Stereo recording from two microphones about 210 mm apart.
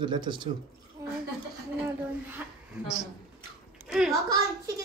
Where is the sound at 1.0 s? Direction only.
15° right (ahead or behind).